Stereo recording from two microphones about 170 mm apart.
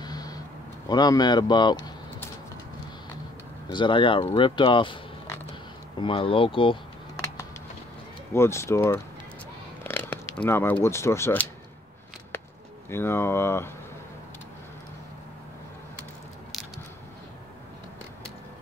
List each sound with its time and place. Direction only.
0.0 s a sound: 25° left (ahead or behind)
0.8 s speech: 25° left (ahead or behind)
3.6 s speech: 30° left (ahead or behind)
5.9 s speech: 30° left (ahead or behind)
8.3 s speech: 15° left (ahead or behind)
12.9 s speech: 15° left (ahead or behind)